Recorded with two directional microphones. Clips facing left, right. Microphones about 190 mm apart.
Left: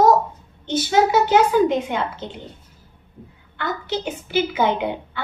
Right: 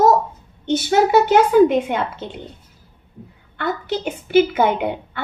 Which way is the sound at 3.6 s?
55° right (ahead or behind).